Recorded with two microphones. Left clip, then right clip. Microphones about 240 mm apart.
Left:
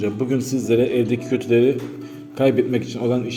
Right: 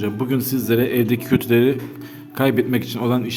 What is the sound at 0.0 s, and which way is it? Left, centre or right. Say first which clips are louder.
A man's voice: left 1 dB; right.